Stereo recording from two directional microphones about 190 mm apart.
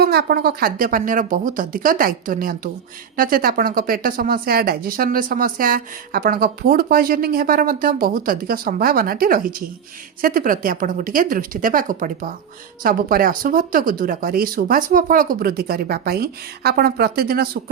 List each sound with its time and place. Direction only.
0.0 s a woman's voice: 55° right (ahead or behind)